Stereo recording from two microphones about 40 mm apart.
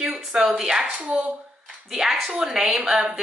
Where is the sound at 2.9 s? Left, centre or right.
Right.